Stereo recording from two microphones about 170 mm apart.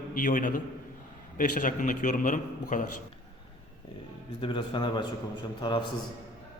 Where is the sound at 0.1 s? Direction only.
55° left (ahead or behind).